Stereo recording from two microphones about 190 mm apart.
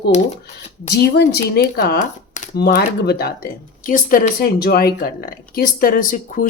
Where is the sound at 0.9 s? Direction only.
60° left (ahead or behind).